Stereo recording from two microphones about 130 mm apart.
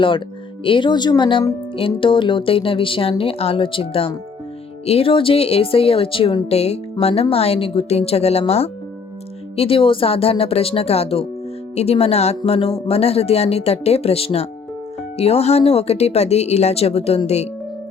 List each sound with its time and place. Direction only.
0.6 s speech: 40° left (ahead or behind); by 17.5 s 55° left (ahead or behind)